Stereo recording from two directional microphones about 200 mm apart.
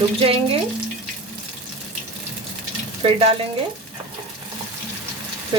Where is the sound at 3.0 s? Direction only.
25° right (ahead or behind).